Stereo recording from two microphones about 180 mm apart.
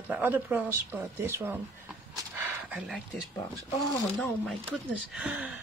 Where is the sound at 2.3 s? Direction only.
5° right (ahead or behind).